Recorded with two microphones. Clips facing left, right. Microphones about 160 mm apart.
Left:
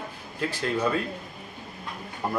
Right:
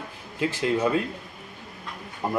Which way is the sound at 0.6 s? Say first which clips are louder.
Right 3 dB; 15° right (ahead or behind).